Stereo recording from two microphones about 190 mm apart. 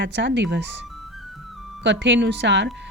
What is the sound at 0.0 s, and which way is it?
A woman's voice, 65° right (ahead or behind).